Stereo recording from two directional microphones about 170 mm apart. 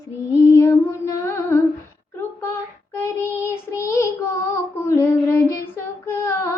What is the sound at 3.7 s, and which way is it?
Child singing, 15° left (ahead or behind).